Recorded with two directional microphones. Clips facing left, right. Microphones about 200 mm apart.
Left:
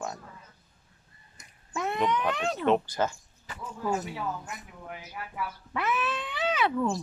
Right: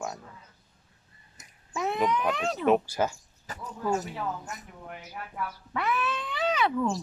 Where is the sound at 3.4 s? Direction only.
40° right (ahead or behind).